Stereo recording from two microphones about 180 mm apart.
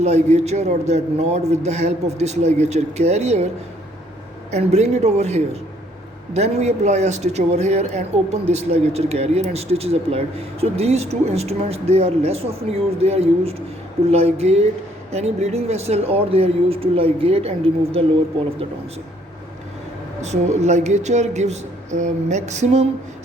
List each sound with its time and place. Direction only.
0.0 s speech: 35° right (ahead or behind)
4.5 s speech: 40° right (ahead or behind)
20.2 s speech: 40° right (ahead or behind)